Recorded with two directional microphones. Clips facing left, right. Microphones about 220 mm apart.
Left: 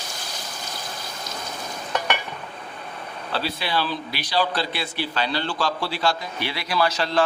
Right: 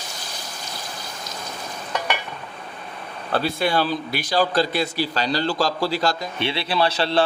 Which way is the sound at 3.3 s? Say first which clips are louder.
Right 5 dB; 50° right (ahead or behind).